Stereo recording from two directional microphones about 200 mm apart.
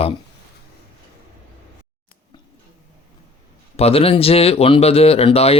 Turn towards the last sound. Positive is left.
turn(degrees=30)  # may be behind; listen again after turning